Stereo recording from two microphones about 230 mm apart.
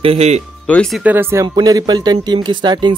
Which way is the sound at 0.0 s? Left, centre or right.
Right.